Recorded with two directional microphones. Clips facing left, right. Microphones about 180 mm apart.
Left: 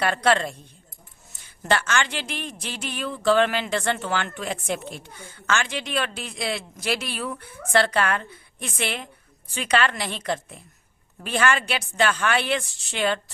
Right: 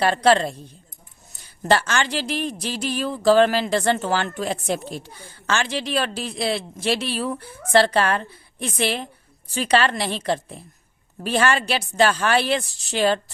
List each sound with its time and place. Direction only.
0.0 s speech: 30° right (ahead or behind)